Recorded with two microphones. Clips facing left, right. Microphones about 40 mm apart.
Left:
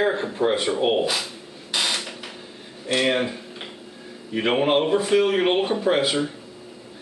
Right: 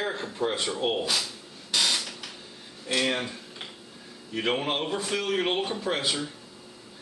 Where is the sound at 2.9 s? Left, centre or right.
Left.